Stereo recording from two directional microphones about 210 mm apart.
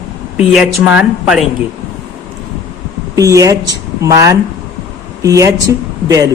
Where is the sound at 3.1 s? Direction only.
15° right (ahead or behind).